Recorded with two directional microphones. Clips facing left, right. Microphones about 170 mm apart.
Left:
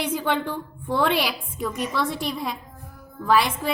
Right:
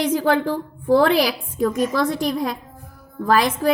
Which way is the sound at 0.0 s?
35° right (ahead or behind).